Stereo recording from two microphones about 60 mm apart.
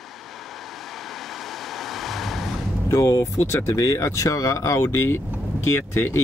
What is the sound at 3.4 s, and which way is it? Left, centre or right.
Speech, left.